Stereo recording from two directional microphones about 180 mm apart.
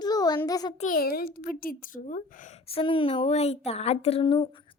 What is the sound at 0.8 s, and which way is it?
Speech, 50° left (ahead or behind).